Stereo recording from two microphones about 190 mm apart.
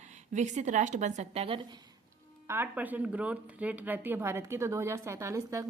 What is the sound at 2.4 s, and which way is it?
Speech, 10° right (ahead or behind).